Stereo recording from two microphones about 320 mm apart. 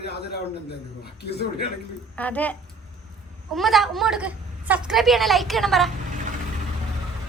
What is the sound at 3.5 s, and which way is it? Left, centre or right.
A woman's voice, centre.